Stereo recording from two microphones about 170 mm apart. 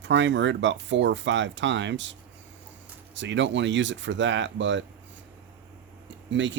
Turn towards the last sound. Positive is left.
turn(degrees=-90)